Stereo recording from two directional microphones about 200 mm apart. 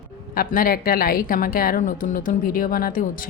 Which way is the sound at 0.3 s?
45° left (ahead or behind).